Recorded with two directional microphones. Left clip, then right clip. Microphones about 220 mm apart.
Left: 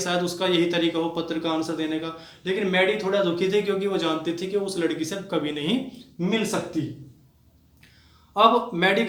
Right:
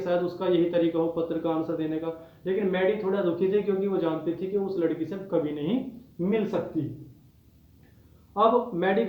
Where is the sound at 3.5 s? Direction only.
25° left (ahead or behind).